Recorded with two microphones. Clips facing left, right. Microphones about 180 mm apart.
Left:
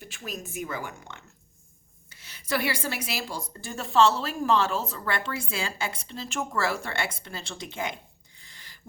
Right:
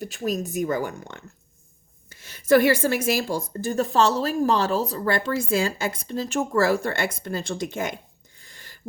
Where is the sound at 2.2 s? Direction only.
45° right (ahead or behind).